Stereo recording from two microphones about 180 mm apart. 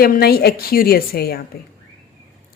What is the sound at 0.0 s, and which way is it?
A woman's voice, 60° left (ahead or behind).